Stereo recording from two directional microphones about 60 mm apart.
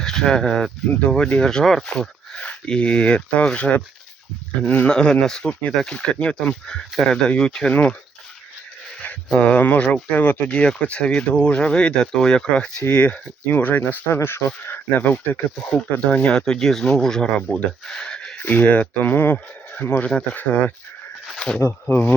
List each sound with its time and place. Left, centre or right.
0.0 s speech: centre
7.7 s speech: left
9.4 s speech: left
12.9 s speech: left
14.1 s speech: left
15.7 s speech: left
16.3 s speech: centre
18.3 s speech: left
21.3 s a sound: centre
21.8 s speech: left